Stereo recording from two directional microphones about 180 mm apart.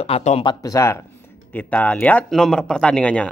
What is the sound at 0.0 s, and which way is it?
Speech, 35° left (ahead or behind).